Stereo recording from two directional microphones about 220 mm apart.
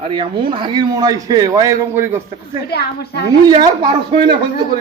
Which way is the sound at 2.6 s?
45° left (ahead or behind).